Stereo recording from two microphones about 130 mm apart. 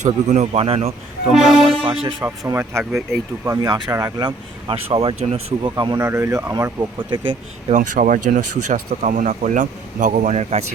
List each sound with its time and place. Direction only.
0.0 s speech: 65° right (ahead or behind)
0.6 s speech: 50° right (ahead or behind)
1.3 s speech: centre (ahead or behind)
1.6 s music: 45° right (ahead or behind)
2.4 s speech: 20° right (ahead or behind)
4.7 s speech: 45° right (ahead or behind)
5.7 s speech: 35° right (ahead or behind)
6.0 s speech: 20° right (ahead or behind)
7.7 s speech: 90° right; by 10.7 s 60° right (ahead or behind)